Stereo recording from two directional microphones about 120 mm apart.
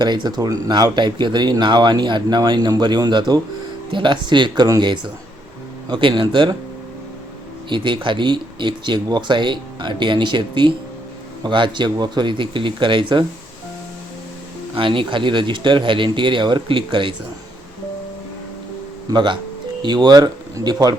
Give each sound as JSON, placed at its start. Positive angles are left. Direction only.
{"t": 0.0, "sound": "speech", "side_deg": -35}
{"t": 7.7, "sound": "speech", "side_deg": -40}
{"t": 14.8, "sound": "speech", "side_deg": -45}
{"t": 19.1, "sound": "speech", "side_deg": -40}